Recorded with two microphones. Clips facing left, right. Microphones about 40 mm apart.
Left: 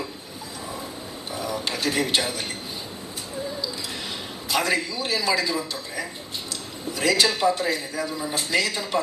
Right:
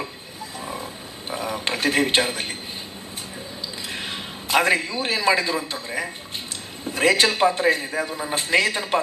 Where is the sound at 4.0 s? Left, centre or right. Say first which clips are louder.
Right 2 dB; right.